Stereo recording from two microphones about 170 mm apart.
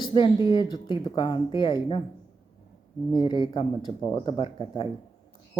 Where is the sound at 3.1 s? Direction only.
25° left (ahead or behind).